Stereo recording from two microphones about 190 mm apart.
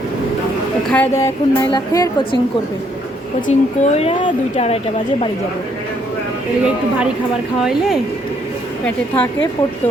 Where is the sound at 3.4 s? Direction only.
35° left (ahead or behind).